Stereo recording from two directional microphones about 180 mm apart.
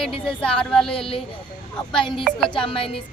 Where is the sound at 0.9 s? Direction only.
30° left (ahead or behind).